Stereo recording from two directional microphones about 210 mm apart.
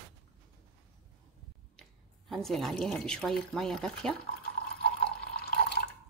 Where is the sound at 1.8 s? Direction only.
Centre (ahead or behind).